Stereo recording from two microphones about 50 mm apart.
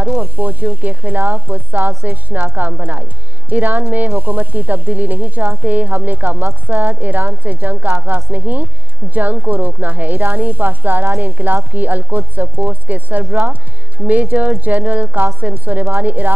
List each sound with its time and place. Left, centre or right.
0.2 s speech: right